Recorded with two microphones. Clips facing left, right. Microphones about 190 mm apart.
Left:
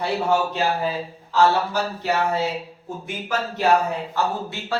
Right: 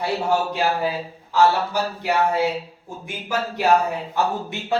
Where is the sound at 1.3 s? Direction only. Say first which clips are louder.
Even; 15° right (ahead or behind).